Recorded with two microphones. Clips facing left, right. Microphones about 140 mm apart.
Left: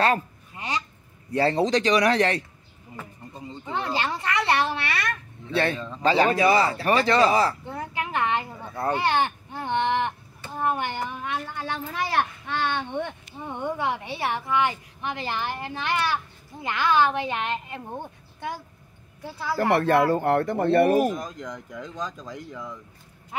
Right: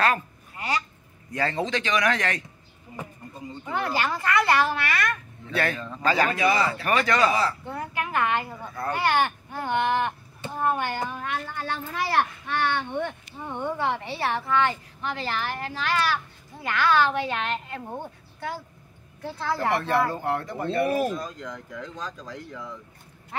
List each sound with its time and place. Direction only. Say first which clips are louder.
0.0 s a sound: left 2 dB; 25° left (ahead or behind)
1.3 s speech: left 5 dB; 35° left (ahead or behind)
3.4 s speech: right 1 dB; 20° left (ahead or behind)
7.8 s a child's voice: even; 20° left (ahead or behind)
19.7 s speech: left 6 dB; 55° left (ahead or behind)
21.0 s speech: left 2 dB; 15° left (ahead or behind)